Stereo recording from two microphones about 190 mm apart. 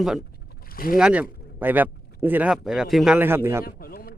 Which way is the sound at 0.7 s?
50° left (ahead or behind).